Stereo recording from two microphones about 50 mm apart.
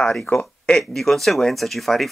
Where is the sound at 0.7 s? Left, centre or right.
Centre.